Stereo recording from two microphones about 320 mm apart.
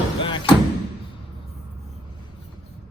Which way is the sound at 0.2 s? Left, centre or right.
Centre.